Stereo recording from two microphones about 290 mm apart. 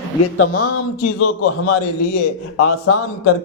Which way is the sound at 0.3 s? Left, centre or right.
Left.